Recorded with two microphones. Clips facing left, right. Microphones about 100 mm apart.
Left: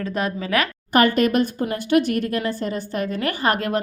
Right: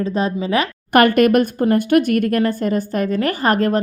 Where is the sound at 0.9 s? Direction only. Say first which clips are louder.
Right 5 dB; 60° right (ahead or behind).